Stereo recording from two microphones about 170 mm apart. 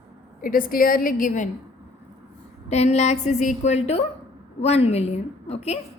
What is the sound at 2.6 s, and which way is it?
A woman's voice, 40° left (ahead or behind).